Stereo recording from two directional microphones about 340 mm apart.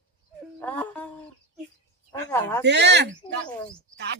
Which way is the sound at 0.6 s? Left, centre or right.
Centre.